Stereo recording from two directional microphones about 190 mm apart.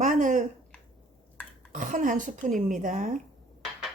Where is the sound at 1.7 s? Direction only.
45° right (ahead or behind).